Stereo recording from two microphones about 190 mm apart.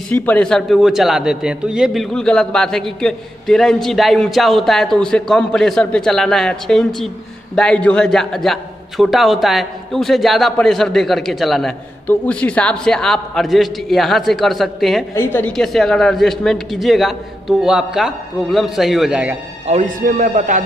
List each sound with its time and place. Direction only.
0.1 s a man's voice: 10° left (ahead or behind)
15.1 s a man's voice: 10° left (ahead or behind); by 19.3 s 5° right (ahead or behind)
19.6 s speech: 35° right (ahead or behind)